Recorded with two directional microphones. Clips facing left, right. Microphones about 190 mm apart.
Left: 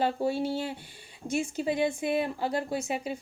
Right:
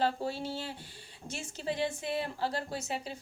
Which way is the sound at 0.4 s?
15° left (ahead or behind).